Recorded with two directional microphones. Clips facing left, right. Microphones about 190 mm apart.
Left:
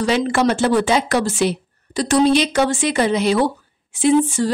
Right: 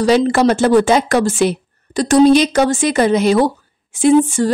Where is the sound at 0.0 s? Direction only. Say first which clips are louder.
Right 5 dB; 40° right (ahead or behind).